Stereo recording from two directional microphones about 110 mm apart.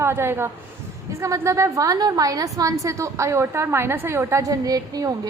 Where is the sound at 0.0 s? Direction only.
25° right (ahead or behind).